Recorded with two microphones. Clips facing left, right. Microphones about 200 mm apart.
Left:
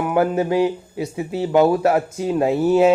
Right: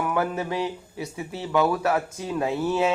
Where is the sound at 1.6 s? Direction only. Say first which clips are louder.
Left 6 dB; 35° left (ahead or behind).